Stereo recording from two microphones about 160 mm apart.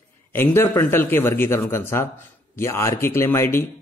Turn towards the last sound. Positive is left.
turn(degrees=15)  # may be behind; listen again after turning